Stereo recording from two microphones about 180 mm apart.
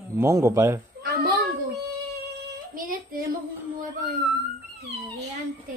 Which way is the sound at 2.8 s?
50° right (ahead or behind).